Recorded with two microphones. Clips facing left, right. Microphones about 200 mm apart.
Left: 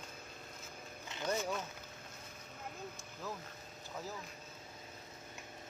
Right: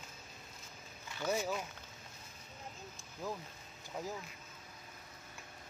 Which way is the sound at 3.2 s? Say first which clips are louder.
Right 3 dB; 15° right (ahead or behind).